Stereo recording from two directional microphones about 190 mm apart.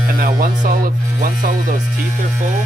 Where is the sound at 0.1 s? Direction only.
45° right (ahead or behind).